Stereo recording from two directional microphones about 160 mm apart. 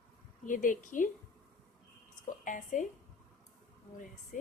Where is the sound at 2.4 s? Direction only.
55° left (ahead or behind).